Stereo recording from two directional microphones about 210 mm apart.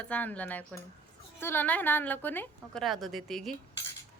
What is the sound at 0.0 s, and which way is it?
A woman's voice, 5° left (ahead or behind).